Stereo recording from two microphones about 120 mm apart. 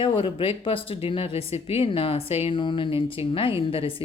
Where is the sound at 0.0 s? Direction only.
45° left (ahead or behind).